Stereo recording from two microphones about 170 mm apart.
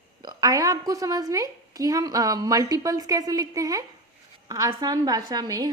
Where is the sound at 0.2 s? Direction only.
25° right (ahead or behind).